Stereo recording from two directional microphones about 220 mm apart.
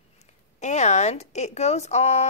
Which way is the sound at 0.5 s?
30° left (ahead or behind).